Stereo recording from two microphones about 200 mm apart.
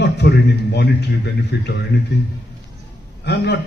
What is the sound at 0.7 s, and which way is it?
A man's voice, 55° left (ahead or behind).